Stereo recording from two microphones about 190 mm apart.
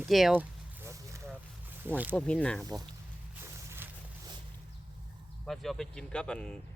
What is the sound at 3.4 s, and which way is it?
Walk, 15° right (ahead or behind).